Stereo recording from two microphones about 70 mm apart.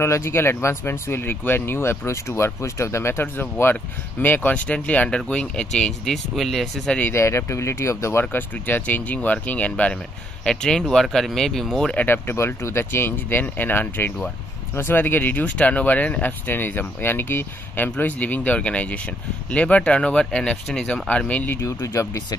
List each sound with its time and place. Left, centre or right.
0.0 s speech: left; by 7.0 s centre
7.2 s speech: left
8.2 s speech: left; by 12.0 s centre
12.0 s speech: left
21.8 s speech: left